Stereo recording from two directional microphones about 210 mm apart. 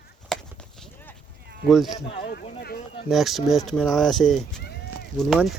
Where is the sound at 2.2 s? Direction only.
50° left (ahead or behind).